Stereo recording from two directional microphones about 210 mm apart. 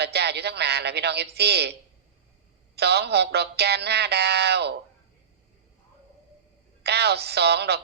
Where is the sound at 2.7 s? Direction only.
50° right (ahead or behind).